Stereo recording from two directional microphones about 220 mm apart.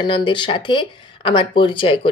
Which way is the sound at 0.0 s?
20° left (ahead or behind).